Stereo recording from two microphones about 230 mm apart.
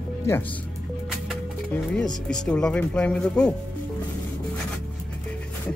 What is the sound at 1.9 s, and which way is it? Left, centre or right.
Speech, centre.